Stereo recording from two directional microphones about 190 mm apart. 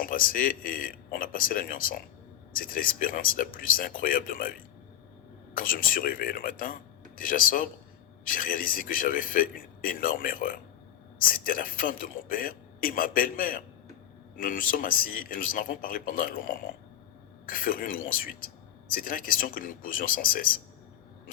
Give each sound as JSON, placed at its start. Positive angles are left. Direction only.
{"t": 0.0, "sound": "speech", "side_deg": 50}